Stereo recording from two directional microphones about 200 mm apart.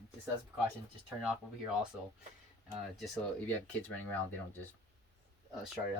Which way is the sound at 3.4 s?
10° left (ahead or behind).